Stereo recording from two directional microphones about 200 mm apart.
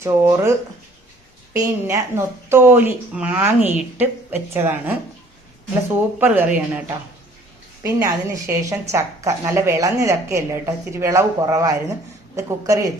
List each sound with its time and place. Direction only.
0.0 s a woman's voice: 15° right (ahead or behind)
1.5 s a woman's voice: 15° right (ahead or behind)
6.1 s a woman's voice: 10° right (ahead or behind)